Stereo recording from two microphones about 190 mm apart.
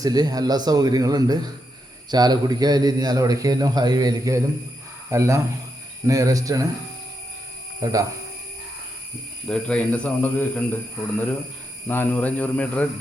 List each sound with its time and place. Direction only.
0.0 s a man's voice: 20° right (ahead or behind)
7.8 s speech: 20° right (ahead or behind)
9.5 s speech: 5° left (ahead or behind)
11.9 s speech: 10° left (ahead or behind)